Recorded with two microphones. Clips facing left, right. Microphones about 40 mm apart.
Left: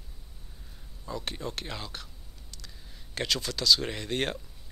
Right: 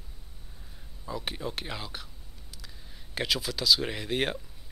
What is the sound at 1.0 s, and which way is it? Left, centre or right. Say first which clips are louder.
Speech: right 1 dB; centre.